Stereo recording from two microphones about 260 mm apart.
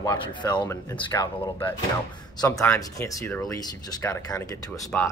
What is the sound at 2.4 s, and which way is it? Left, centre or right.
Speech, centre.